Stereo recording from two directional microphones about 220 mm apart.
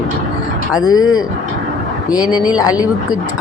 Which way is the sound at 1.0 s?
70° left (ahead or behind).